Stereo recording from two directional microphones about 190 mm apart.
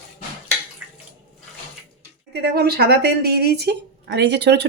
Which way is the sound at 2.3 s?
55° right (ahead or behind).